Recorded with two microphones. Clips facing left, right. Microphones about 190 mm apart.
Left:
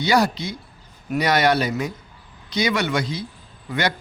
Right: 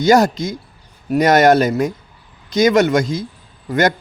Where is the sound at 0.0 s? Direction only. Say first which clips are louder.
Right 7 dB; 45° right (ahead or behind).